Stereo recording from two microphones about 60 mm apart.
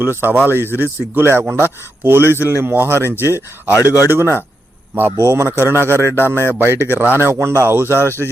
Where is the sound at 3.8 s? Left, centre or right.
Left.